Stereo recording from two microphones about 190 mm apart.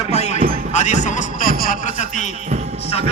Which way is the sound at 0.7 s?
40° left (ahead or behind).